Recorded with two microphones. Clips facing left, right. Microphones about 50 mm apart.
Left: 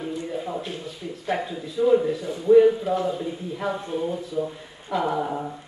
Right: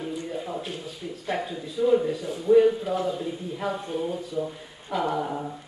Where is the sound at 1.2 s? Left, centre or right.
Centre.